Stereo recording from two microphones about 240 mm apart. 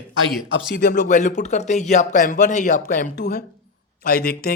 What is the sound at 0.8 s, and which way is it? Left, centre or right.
Speech, left.